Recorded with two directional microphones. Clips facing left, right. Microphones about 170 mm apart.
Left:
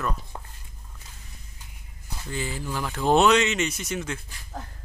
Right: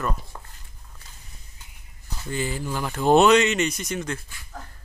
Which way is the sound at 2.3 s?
Centre (ahead or behind).